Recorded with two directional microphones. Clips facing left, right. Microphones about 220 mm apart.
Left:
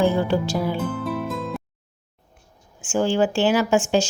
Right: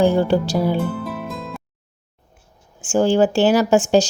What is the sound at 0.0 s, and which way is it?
Speech, 35° right (ahead or behind).